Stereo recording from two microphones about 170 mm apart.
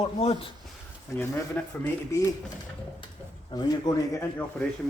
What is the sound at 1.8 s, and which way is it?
Speech, 20° left (ahead or behind).